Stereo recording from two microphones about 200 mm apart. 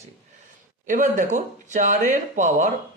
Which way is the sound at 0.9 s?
40° right (ahead or behind).